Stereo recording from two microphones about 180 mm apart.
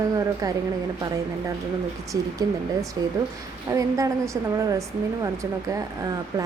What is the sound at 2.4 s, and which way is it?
A woman's voice, 20° right (ahead or behind).